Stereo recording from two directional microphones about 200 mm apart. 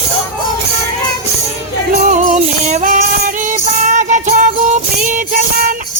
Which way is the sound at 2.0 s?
40° right (ahead or behind).